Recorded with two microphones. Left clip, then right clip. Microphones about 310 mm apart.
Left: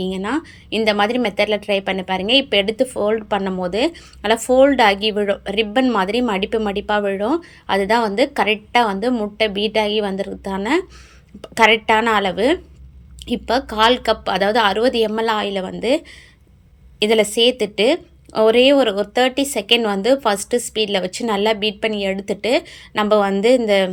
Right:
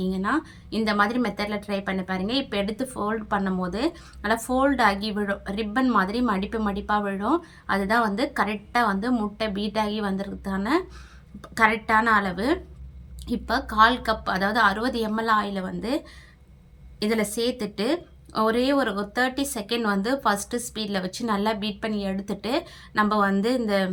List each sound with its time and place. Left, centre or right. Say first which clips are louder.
0.0 s a woman's voice: left 3 dB; centre
11.9 s a woman's voice: left 5 dB; centre
13.5 s a woman's voice: left 4 dB; centre
17.1 s a woman's voice: left 10 dB; centre